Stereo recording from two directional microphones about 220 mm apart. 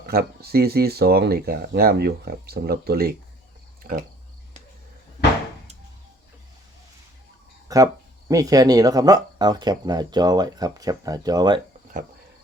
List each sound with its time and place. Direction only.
0.0 s speech: 45° right (ahead or behind)
7.7 s speech: 15° right (ahead or behind)